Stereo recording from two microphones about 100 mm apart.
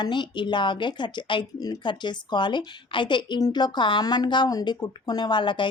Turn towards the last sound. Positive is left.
turn(degrees=50)  # may be behind; listen again after turning